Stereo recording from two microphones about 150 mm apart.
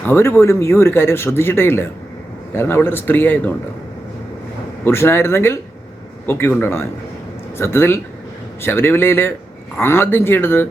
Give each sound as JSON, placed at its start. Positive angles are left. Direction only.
{"t": 0.0, "sound": "speech", "side_deg": 15}
{"t": 4.9, "sound": "speech", "side_deg": 15}